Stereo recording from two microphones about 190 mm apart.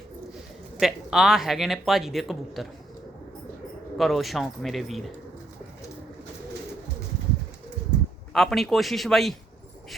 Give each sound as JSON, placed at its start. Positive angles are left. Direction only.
{"t": 0.8, "sound": "speech", "side_deg": 0}
{"t": 3.9, "sound": "speech", "side_deg": 0}
{"t": 8.3, "sound": "speech", "side_deg": 0}